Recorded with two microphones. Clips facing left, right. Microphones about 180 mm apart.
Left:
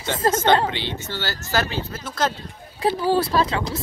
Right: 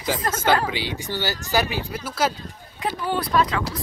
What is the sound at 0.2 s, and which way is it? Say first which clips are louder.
Speech: left 7 dB; 30° left (ahead or behind).